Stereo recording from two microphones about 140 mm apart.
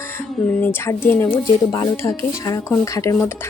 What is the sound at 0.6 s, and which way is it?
Speech, 15° left (ahead or behind).